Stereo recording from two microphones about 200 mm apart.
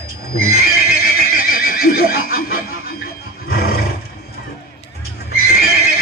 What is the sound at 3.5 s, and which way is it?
Roar, 50° left (ahead or behind).